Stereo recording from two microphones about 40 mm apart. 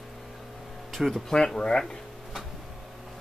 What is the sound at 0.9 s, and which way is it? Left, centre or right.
Speech, centre.